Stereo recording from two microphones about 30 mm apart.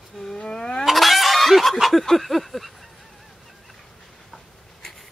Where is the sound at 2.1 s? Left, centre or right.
Centre.